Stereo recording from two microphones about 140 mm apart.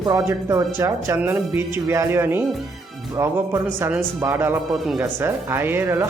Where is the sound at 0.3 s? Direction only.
20° right (ahead or behind).